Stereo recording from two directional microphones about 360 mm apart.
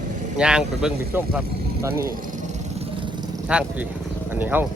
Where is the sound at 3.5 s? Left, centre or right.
Centre.